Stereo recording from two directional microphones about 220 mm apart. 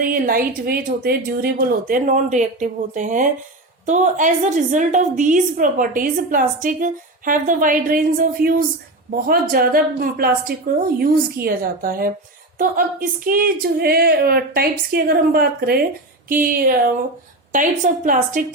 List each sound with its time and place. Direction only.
0.0 s a woman's voice: 40° right (ahead or behind)